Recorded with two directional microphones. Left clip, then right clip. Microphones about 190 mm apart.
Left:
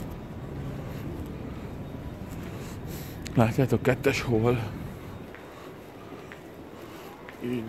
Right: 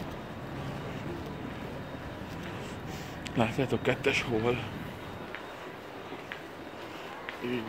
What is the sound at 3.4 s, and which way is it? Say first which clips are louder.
Speech: left 4 dB; 40° left (ahead or behind).